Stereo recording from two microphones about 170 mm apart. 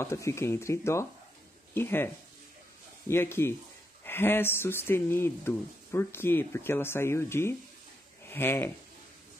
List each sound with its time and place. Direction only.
0.0 s speech: 15° left (ahead or behind)
3.1 s speech: 15° left (ahead or behind)